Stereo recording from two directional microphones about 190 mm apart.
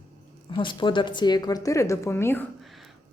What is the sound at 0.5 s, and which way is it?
A woman's voice, 25° left (ahead or behind).